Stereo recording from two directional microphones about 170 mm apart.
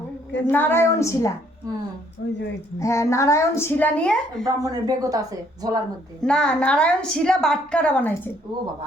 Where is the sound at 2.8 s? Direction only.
15° left (ahead or behind).